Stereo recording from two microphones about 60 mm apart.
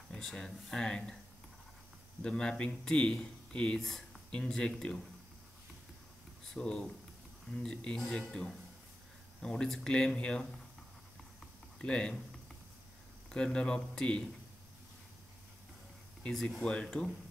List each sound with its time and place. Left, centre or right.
0.1 s speech: centre
2.2 s speech: centre
6.4 s speech: centre
11.8 s speech: centre
13.3 s speech: centre
16.8 s speech: centre